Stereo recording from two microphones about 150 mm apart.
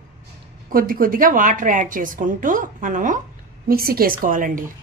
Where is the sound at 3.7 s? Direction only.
80° right; by 4.6 s 65° right (ahead or behind).